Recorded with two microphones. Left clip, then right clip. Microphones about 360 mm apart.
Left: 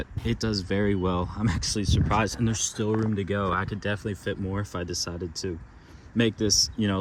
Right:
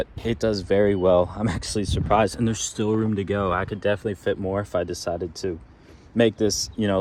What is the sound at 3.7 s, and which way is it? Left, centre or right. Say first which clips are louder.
Speech: right 7 dB; centre.